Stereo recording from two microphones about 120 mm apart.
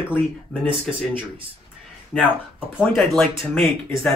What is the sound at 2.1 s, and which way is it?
Speech, 5° left (ahead or behind).